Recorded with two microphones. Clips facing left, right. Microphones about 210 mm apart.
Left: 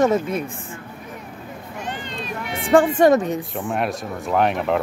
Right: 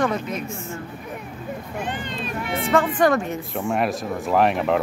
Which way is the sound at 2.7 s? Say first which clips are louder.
Left 5 dB; 25° left (ahead or behind).